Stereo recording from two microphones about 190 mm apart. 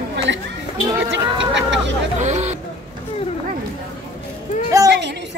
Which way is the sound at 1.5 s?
70° right (ahead or behind).